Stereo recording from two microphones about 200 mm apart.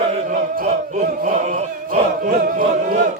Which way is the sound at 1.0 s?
40° right (ahead or behind).